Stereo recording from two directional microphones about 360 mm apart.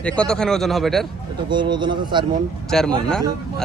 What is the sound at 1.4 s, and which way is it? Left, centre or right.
Speech, centre.